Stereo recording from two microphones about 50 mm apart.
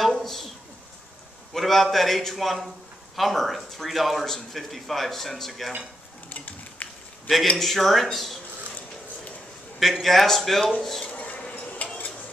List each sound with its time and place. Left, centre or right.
0.1 s a sound: centre
1.5 s speech: centre
6.2 s a sound: left
7.4 s speech: centre
9.8 s speech: centre
11.1 s dishes: left